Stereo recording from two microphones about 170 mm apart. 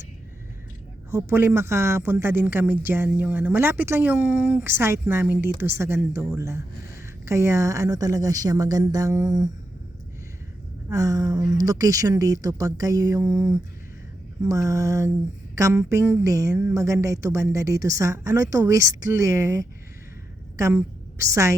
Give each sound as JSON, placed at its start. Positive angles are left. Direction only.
{"t": 1.1, "sound": "a woman's voice", "side_deg": -15}
{"t": 10.8, "sound": "a woman's voice", "side_deg": -20}